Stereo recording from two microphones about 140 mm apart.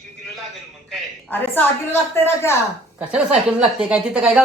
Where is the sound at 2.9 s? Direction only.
10° right (ahead or behind).